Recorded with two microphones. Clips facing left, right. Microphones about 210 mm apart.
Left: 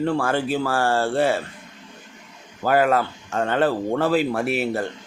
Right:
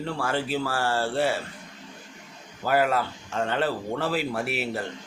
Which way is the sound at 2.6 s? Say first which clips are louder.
Left 5 dB; 50° left (ahead or behind).